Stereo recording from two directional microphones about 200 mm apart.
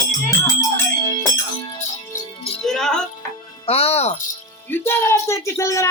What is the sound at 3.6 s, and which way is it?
Music, 30° left (ahead or behind).